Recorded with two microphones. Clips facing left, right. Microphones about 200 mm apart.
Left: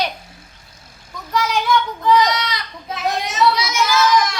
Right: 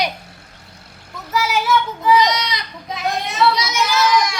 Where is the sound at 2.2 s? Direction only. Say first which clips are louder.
Even; 20° right (ahead or behind).